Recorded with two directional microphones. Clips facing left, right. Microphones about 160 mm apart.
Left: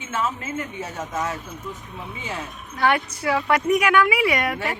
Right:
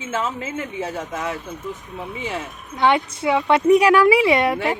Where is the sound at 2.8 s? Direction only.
20° right (ahead or behind).